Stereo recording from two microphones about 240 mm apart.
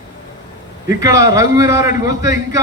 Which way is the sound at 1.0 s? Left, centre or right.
Centre.